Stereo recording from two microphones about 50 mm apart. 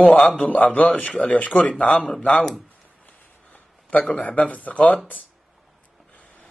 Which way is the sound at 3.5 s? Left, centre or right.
Left.